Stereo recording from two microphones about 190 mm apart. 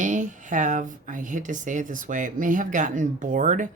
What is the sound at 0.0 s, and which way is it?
Speech, 40° right (ahead or behind).